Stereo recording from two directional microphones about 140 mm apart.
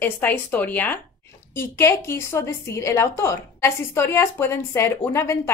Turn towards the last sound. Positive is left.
turn(degrees=20)  # may be behind; listen again after turning